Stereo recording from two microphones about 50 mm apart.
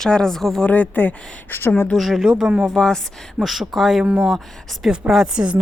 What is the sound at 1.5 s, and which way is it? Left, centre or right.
Speech, left.